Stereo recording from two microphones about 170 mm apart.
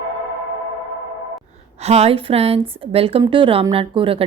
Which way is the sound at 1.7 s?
40° right (ahead or behind).